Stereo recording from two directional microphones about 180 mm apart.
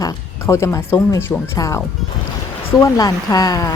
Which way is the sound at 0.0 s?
15° left (ahead or behind).